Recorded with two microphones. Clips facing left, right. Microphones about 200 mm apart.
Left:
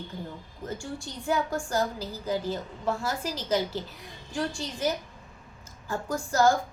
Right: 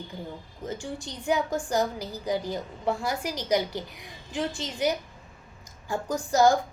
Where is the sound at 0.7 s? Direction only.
20° right (ahead or behind).